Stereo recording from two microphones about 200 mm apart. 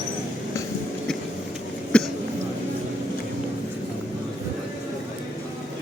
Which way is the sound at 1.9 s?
5° left (ahead or behind).